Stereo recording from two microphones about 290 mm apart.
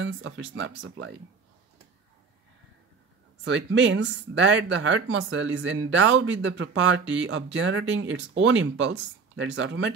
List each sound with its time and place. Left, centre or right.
0.0 s speech: right
3.4 s speech: right